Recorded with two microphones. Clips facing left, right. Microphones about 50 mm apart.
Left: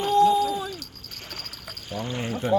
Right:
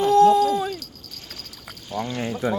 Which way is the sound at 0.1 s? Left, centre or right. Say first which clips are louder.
Right 3 dB; right.